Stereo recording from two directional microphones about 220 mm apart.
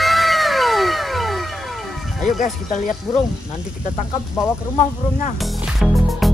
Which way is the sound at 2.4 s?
35° left (ahead or behind).